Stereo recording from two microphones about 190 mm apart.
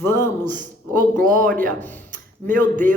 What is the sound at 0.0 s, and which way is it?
Speech, 15° left (ahead or behind).